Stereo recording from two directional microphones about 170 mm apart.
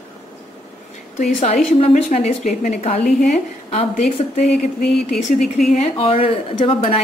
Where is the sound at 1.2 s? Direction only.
50° left (ahead or behind).